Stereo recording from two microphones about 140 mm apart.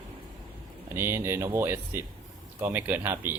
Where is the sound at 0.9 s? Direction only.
15° right (ahead or behind).